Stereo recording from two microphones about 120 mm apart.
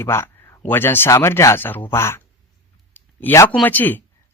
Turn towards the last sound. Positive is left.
turn(degrees=15)  # may be behind; listen again after turning